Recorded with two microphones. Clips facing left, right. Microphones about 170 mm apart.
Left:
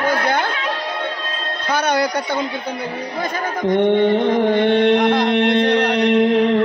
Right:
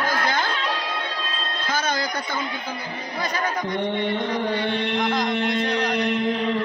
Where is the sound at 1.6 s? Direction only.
65° left (ahead or behind).